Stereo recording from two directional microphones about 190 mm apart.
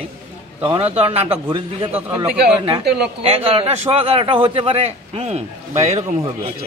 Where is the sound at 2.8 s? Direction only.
60° right (ahead or behind).